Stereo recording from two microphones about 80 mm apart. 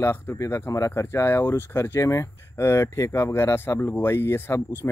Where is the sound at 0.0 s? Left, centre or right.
Left.